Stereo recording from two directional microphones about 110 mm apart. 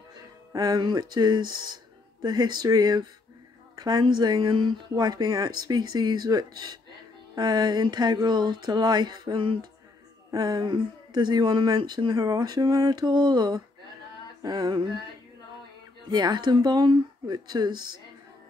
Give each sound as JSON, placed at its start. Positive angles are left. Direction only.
{"t": 0.5, "sound": "speech", "side_deg": -35}
{"t": 16.1, "sound": "speech", "side_deg": -40}